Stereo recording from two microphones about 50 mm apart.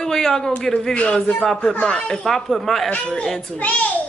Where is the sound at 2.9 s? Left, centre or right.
Left.